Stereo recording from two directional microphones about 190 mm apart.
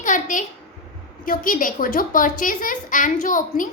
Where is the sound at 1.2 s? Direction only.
45° left (ahead or behind).